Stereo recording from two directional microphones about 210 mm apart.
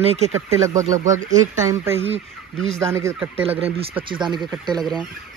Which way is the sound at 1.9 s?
30° right (ahead or behind).